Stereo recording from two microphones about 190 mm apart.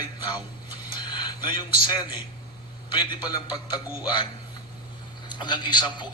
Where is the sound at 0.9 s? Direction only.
25° left (ahead or behind).